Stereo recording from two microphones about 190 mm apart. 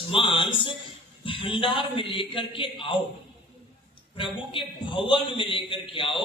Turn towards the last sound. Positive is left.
turn(degrees=25)  # may be behind; listen again after turning